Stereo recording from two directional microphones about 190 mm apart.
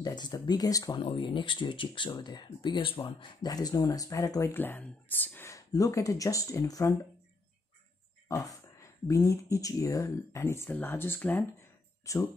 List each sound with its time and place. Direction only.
0.0 s speech: 20° left (ahead or behind)
8.3 s speech: 20° left (ahead or behind)